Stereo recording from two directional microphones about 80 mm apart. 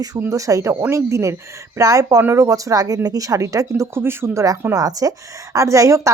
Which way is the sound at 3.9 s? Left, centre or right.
Right.